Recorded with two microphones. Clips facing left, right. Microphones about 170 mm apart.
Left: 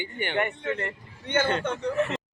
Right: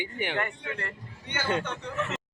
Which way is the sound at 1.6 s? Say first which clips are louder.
Left 7 dB; 40° left (ahead or behind).